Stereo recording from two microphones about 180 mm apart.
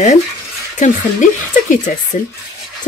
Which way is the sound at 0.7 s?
45° left (ahead or behind).